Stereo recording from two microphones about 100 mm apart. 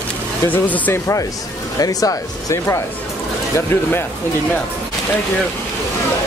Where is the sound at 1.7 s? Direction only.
35° left (ahead or behind).